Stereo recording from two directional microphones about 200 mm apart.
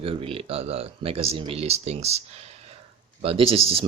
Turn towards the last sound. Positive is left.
turn(degrees=-30)  # may be behind; listen again after turning